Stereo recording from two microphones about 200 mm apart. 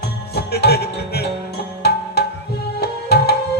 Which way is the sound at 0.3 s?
55° left (ahead or behind).